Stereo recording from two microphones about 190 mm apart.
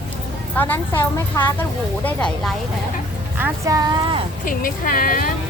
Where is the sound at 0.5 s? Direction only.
10° left (ahead or behind).